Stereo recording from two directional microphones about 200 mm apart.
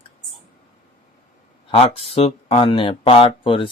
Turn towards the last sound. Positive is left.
turn(degrees=25)  # may be behind; listen again after turning